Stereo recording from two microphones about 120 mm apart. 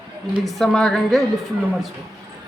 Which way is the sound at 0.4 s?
Centre (ahead or behind).